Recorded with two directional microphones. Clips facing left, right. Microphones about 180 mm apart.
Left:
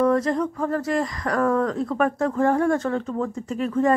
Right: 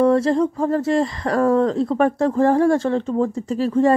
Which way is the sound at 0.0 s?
30° right (ahead or behind).